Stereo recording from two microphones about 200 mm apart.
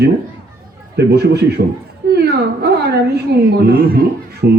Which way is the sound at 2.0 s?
55° right (ahead or behind).